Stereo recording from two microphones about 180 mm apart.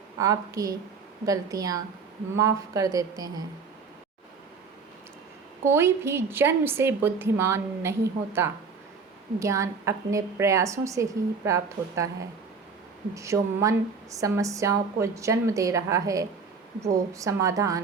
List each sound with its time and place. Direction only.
0.2 s a woman's voice: 20° right (ahead or behind)
5.6 s a woman's voice: 15° right (ahead or behind)
13.1 s a woman's voice: 15° right (ahead or behind)